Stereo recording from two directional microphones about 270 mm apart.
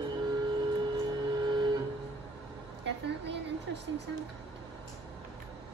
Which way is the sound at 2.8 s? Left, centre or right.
Right.